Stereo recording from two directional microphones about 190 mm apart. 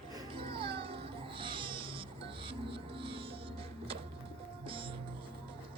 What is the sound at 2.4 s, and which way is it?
Music, 30° right (ahead or behind).